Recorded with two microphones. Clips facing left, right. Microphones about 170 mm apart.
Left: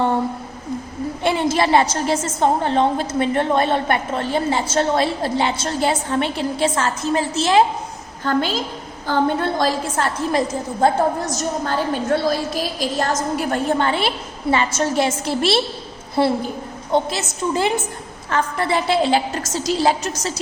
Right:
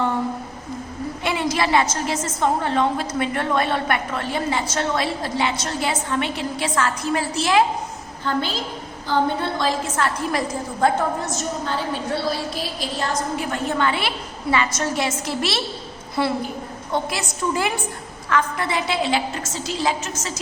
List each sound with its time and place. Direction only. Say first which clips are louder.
1.2 s a woman's voice: left 4 dB; 25° left (ahead or behind)
8.2 s a woman's voice: left 4 dB; 50° left (ahead or behind)